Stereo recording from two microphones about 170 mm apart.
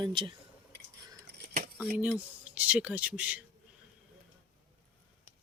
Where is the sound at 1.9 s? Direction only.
10° right (ahead or behind).